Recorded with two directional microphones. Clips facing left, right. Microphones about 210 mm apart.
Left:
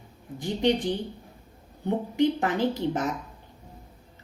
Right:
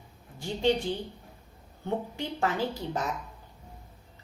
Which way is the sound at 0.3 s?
20° left (ahead or behind).